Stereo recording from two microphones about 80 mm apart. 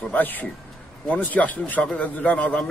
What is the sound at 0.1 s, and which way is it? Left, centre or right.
A man's voice, left.